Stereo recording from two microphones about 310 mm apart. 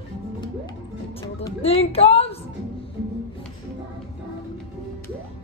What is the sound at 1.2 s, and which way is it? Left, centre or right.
Music, centre.